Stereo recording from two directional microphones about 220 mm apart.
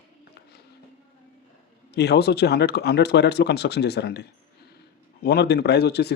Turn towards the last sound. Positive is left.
turn(degrees=50)  # may be behind; listen again after turning